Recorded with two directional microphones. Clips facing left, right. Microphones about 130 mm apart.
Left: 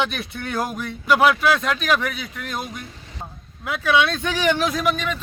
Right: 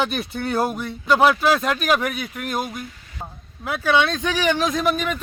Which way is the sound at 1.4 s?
40° right (ahead or behind).